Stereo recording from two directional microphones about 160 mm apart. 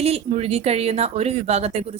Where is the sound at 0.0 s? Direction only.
40° right (ahead or behind).